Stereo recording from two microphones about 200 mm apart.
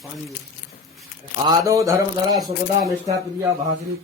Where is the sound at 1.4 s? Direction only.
15° right (ahead or behind).